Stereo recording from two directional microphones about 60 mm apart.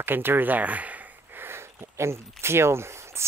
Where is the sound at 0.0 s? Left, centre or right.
Right.